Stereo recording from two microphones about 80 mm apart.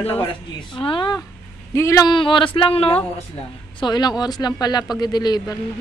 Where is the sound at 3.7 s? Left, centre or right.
Left.